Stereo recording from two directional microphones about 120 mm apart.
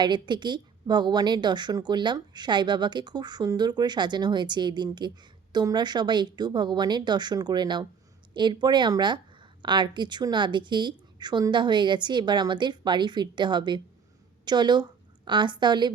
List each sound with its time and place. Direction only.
0.0 s a woman's voice: 40° right (ahead or behind)